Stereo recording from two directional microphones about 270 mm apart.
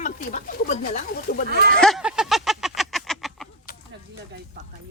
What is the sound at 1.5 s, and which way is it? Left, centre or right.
Speech, right.